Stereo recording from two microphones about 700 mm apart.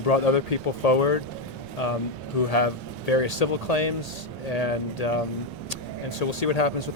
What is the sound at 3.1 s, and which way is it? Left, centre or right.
A man's voice, left.